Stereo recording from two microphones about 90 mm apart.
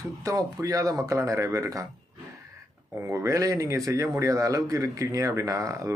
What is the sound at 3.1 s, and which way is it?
A man's voice, 35° right (ahead or behind).